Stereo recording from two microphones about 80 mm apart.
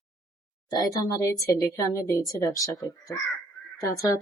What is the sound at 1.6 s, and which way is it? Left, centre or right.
A woman's voice, left.